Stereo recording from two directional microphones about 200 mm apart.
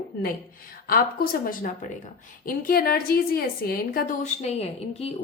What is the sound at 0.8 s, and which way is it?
A woman's voice, 50° left (ahead or behind).